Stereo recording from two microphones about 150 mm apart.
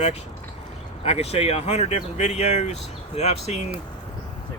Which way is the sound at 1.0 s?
45° left (ahead or behind).